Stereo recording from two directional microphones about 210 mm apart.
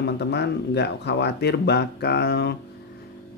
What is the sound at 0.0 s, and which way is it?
Speech, 55° left (ahead or behind).